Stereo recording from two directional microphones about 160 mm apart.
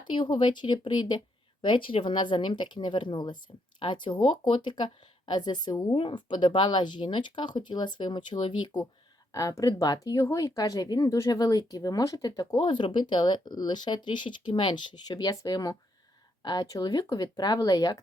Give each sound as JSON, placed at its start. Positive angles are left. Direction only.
{"t": 0.1, "sound": "speech", "side_deg": 30}